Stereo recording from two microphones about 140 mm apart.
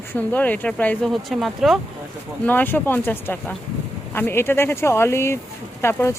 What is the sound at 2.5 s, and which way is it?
Speech, 15° left (ahead or behind).